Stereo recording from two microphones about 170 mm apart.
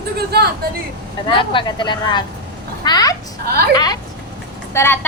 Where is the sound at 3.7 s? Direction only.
25° left (ahead or behind).